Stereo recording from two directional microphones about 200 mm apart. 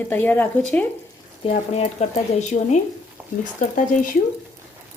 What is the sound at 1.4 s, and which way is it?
Speech, 30° left (ahead or behind).